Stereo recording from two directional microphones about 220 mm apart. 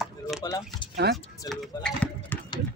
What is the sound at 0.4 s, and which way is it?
Speech, 20° left (ahead or behind).